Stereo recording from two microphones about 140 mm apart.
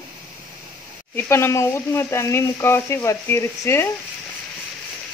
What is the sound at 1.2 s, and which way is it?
Speech, 20° left (ahead or behind).